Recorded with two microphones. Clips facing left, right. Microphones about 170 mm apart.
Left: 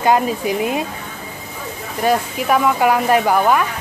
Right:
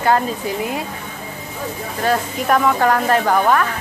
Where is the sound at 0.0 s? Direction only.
15° left (ahead or behind).